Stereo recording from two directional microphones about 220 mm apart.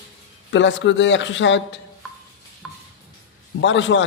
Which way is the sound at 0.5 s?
55° left (ahead or behind).